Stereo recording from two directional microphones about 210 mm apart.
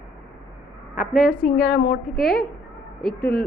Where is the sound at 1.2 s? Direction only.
40° left (ahead or behind).